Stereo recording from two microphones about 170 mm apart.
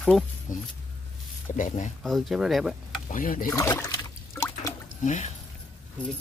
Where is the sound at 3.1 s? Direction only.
55° left (ahead or behind).